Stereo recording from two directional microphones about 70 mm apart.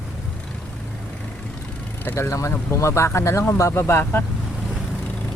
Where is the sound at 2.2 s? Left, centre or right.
Left.